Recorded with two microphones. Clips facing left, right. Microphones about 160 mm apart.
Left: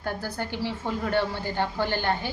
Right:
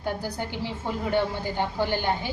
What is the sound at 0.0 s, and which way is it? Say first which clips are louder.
A woman's voice: right 1 dB; 15° right (ahead or behind).